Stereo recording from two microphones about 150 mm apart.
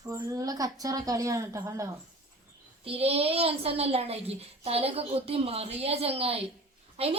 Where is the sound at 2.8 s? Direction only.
40° right (ahead or behind).